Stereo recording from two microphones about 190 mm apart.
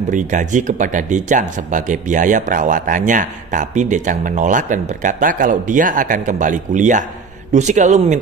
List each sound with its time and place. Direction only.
0.1 s speech: 40° right (ahead or behind)